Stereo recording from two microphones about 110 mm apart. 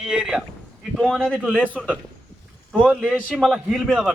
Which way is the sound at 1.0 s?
5° left (ahead or behind).